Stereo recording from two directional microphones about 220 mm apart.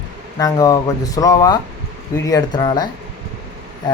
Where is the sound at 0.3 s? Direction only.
15° left (ahead or behind).